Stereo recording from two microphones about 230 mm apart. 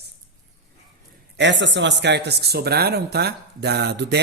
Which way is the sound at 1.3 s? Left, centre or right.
Right.